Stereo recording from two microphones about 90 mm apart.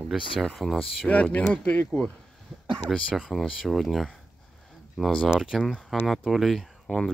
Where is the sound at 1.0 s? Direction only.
15° left (ahead or behind).